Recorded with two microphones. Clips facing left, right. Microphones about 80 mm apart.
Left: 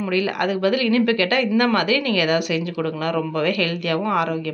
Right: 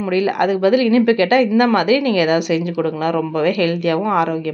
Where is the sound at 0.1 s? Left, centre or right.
Right.